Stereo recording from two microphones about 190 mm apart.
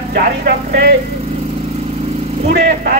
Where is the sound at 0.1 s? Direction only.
55° right (ahead or behind).